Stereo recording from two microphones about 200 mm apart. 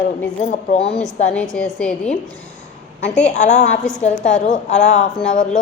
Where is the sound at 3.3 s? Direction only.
35° left (ahead or behind).